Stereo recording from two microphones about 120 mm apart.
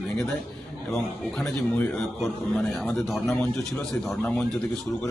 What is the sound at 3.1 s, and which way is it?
A man's voice, centre (ahead or behind).